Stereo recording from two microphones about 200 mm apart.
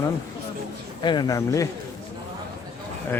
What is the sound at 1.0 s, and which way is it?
Speech, 20° left (ahead or behind).